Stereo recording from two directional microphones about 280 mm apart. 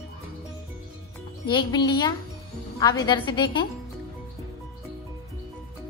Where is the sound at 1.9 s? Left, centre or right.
Centre.